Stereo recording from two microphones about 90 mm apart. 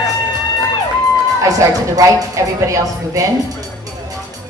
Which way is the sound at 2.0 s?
40° right (ahead or behind).